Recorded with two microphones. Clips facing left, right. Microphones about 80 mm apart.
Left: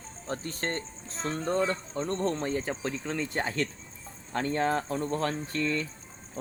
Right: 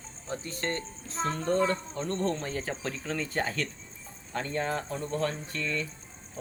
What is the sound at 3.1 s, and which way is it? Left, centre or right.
Speech, left.